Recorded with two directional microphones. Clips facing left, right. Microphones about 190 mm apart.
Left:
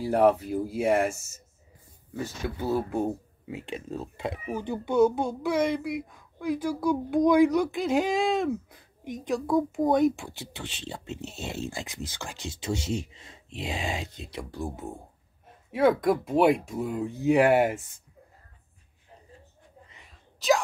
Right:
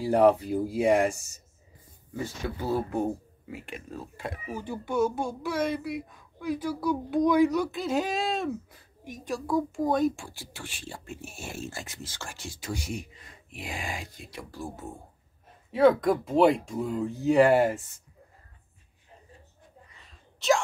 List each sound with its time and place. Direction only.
0.0 s speech: centre (ahead or behind)
2.4 s speech: 5° left (ahead or behind)
3.4 s a child's voice: 20° left (ahead or behind)
15.7 s speech: 10° left (ahead or behind)
19.9 s a sound: 15° left (ahead or behind)
20.3 s speech: centre (ahead or behind)